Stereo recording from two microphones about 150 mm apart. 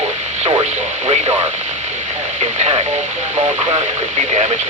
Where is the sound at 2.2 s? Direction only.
45° right (ahead or behind).